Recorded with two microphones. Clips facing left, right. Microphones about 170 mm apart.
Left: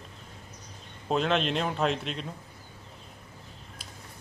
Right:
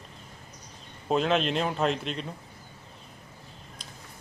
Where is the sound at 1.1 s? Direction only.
Centre (ahead or behind).